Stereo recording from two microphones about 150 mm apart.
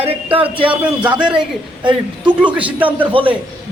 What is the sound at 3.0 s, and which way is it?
Speech, 35° right (ahead or behind).